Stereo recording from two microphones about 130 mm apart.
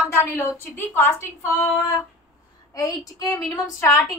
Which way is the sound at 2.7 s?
30° left (ahead or behind).